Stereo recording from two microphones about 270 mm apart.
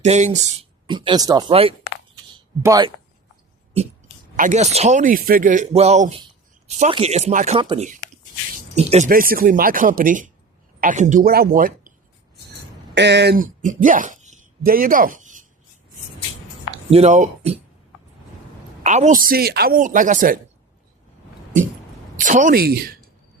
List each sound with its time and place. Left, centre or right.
0.0 s speech: right
2.3 s a sound: centre
4.4 s speech: right
16.9 s speech: right
18.8 s speech: right
22.2 s speech: right